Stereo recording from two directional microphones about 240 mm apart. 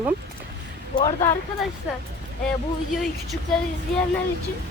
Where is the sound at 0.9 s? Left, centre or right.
Centre.